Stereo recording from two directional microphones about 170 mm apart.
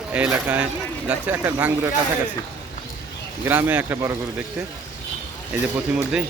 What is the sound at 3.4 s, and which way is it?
Speech, 10° right (ahead or behind).